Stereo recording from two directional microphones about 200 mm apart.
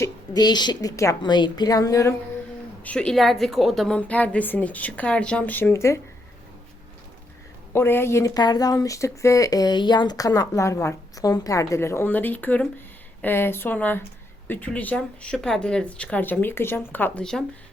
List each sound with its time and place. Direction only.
0.0 s a woman's voice: 20° left (ahead or behind)
2.8 s speech: 5° left (ahead or behind)
7.7 s speech: 10° left (ahead or behind)